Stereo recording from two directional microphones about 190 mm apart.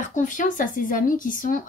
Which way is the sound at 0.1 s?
40° left (ahead or behind).